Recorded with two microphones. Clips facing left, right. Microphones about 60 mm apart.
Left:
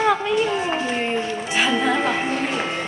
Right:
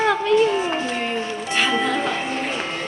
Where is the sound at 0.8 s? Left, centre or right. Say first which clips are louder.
Left 1 dB; left.